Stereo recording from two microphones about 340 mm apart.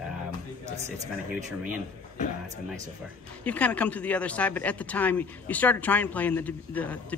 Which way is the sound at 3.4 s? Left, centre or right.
Centre.